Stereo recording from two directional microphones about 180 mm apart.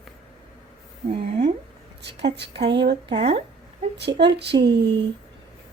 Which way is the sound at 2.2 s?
65° right (ahead or behind).